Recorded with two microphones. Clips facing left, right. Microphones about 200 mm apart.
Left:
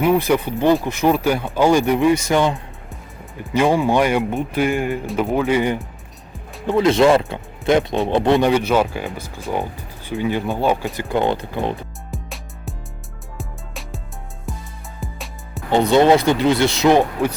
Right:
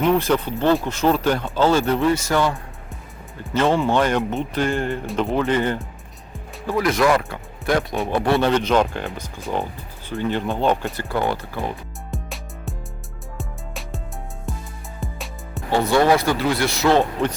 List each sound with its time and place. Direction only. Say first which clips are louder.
0.0 s speech: left 2 dB; 10° left (ahead or behind)
6.7 s speech: left 5 dB; 25° left (ahead or behind); by 11.0 s 5° left (ahead or behind)
11.1 s speech: left 4 dB; 20° left (ahead or behind)
12.1 s music: right 1 dB; centre (ahead or behind)
15.7 s speech: left 4 dB; 20° left (ahead or behind)